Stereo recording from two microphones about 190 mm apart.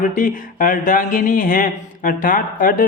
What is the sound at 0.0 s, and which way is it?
Speech, 45° left (ahead or behind).